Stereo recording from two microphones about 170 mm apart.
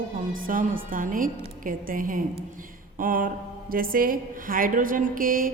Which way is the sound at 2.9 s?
55° right (ahead or behind).